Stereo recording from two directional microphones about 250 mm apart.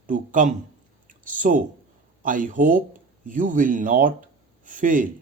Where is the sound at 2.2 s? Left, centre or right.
Right.